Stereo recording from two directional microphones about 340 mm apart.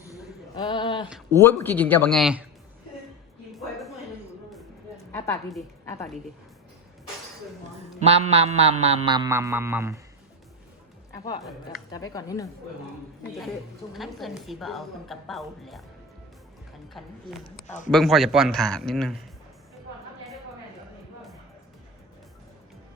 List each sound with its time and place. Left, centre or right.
0.5 s a sound: centre
1.3 s a woman's voice: centre
5.1 s a woman's voice: centre
7.9 s music: centre
11.9 s a woman's voice: centre
13.9 s a woman's voice: centre
16.9 s a woman's voice: centre
17.7 s a man's voice: left
17.9 s a woman's voice: centre